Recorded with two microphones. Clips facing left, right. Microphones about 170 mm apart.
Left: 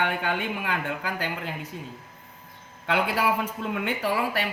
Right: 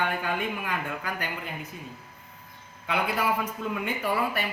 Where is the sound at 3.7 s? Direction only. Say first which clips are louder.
Left 2 dB; 80° left.